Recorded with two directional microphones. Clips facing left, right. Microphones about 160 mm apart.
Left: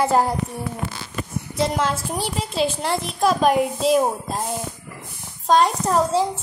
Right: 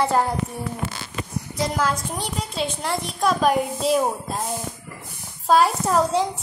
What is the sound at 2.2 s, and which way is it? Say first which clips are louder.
Speech: left 7 dB; centre (ahead or behind).